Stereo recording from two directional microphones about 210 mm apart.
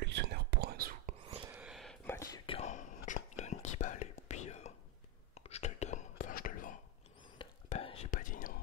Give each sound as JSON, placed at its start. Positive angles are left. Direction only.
{"t": 0.0, "sound": "whispering", "side_deg": -55}
{"t": 1.5, "sound": "a sound", "side_deg": -5}
{"t": 2.1, "sound": "whispering", "side_deg": 20}
{"t": 7.3, "sound": "whispering", "side_deg": 30}